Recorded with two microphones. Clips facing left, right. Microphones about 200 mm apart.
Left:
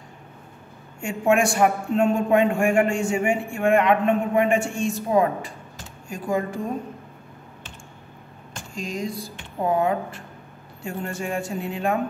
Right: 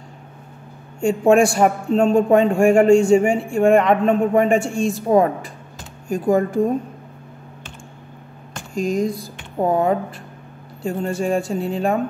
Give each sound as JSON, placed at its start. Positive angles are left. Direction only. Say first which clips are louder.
{"t": 1.0, "sound": "a man's voice", "louder": "right 6 dB", "side_deg": -30}
{"t": 6.0, "sound": "speech", "louder": "right 8 dB", "side_deg": -50}
{"t": 8.5, "sound": "a sound", "louder": "right 10 dB", "side_deg": -50}
{"t": 9.7, "sound": "a man's voice", "louder": "right 3 dB", "side_deg": -40}